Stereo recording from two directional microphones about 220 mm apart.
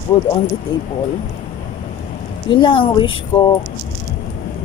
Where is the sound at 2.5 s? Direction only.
20° left (ahead or behind).